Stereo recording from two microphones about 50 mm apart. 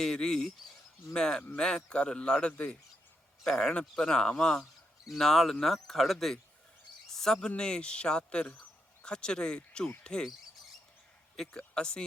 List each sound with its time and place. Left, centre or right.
0.0 s speech: centre
7.1 s a sound: centre
7.5 s speech: centre
11.5 s speech: centre